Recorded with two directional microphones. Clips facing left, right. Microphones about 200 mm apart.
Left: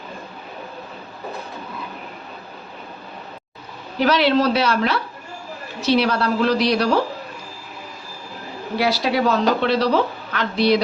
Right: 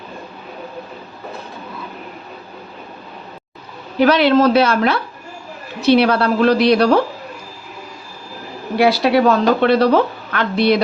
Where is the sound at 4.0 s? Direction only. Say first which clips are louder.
Right 5 dB; 55° right (ahead or behind).